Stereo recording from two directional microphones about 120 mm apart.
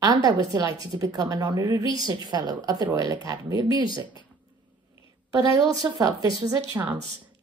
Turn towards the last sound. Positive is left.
turn(degrees=-15)  # may be behind; listen again after turning